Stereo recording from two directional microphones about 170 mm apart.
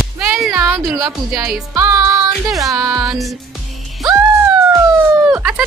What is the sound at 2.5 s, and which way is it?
Music, 20° right (ahead or behind).